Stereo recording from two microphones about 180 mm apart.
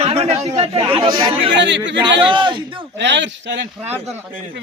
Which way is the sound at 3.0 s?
80° right.